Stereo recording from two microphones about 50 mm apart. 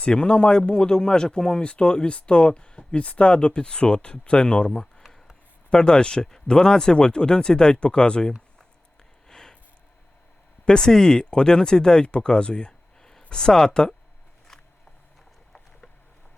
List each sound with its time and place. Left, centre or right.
0.0 s speech: centre
9.3 s a sound: centre
10.7 s speech: centre